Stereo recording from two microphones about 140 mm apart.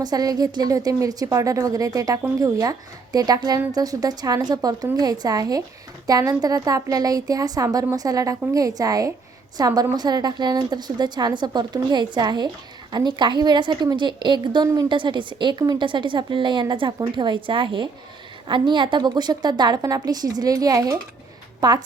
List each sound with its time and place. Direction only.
0.0 s a woman's voice: 25° right (ahead or behind)